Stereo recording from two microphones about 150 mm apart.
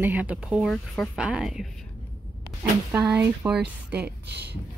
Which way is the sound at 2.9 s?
10° right (ahead or behind).